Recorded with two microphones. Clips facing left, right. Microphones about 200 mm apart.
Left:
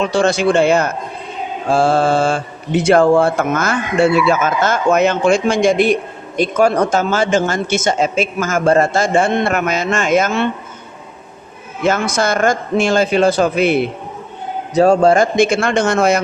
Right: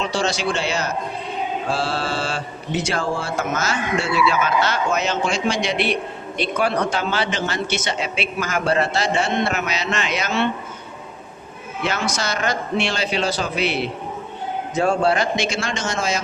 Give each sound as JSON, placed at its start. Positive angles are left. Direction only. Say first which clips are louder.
{"t": 0.0, "sound": "a man's voice", "louder": "left 8 dB", "side_deg": 55}
{"t": 11.8, "sound": "speech", "louder": "left 8 dB", "side_deg": 50}
{"t": 14.7, "sound": "a man's voice", "louder": "left 8 dB", "side_deg": 40}